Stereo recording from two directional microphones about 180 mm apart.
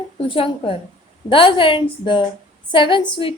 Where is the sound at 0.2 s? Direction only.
30° left (ahead or behind).